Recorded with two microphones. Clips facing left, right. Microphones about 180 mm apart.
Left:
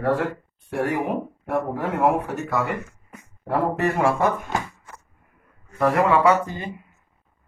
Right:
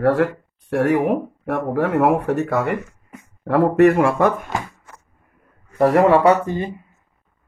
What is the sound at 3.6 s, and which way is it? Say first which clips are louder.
Speech: right 8 dB; 70° right (ahead or behind).